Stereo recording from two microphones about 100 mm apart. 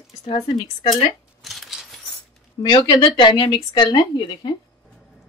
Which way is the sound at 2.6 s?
45° left (ahead or behind).